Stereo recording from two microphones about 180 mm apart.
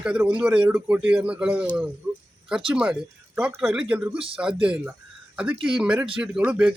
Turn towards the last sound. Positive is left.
turn(degrees=-10)  # may be behind; listen again after turning